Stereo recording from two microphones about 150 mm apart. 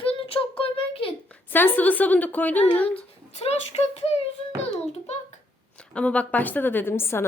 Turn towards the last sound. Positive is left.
turn(degrees=15)  # may be behind; listen again after turning